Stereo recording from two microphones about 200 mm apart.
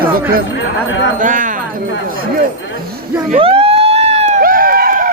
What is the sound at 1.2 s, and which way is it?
Speech, 40° right (ahead or behind).